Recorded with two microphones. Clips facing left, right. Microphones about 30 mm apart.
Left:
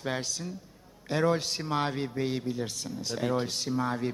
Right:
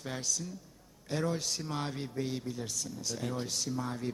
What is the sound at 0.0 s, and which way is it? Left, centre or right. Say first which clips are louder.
A man's voice: left 4 dB; left.